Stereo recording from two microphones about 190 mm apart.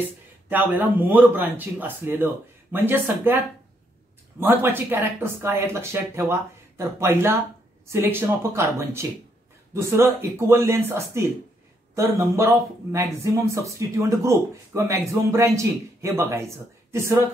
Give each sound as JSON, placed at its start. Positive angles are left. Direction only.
{"t": 0.5, "sound": "speech", "side_deg": -10}
{"t": 4.4, "sound": "speech", "side_deg": -10}